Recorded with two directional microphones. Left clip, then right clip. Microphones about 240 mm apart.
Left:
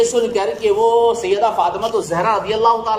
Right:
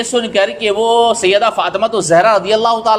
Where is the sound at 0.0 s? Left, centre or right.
Right.